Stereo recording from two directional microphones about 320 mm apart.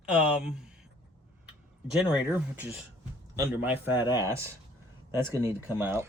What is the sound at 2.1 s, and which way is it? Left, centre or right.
A man's voice, centre.